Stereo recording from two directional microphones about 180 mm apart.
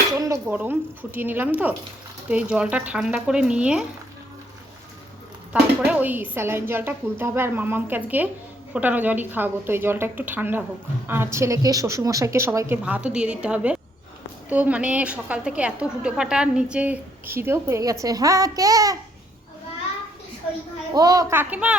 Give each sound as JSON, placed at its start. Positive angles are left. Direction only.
{"t": 0.2, "sound": "a woman's voice", "side_deg": -15}
{"t": 5.5, "sound": "a woman's voice", "side_deg": -5}
{"t": 20.9, "sound": "a woman's voice", "side_deg": -20}